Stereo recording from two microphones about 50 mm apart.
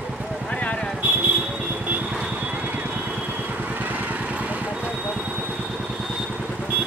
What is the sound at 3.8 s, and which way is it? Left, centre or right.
Vehicle, right.